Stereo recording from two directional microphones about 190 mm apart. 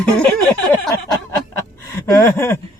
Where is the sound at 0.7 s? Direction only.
15° left (ahead or behind).